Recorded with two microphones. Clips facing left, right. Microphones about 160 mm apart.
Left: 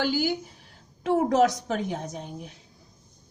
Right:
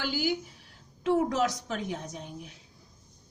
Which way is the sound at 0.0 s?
45° left (ahead or behind).